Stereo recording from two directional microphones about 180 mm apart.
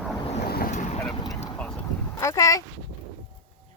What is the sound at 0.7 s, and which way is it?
Boat, 40° left (ahead or behind).